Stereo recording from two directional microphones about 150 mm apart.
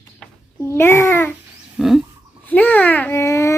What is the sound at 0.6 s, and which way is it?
Babbling, 15° left (ahead or behind).